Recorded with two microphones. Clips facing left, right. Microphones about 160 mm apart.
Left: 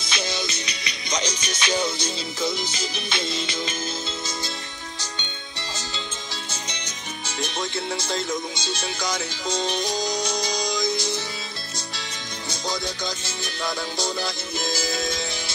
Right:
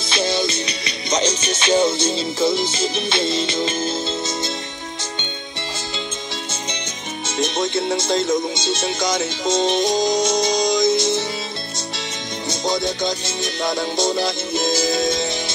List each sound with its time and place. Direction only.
0.0 s music: 30° right (ahead or behind)
7.2 s music: 20° right (ahead or behind)
12.4 s music: 25° right (ahead or behind)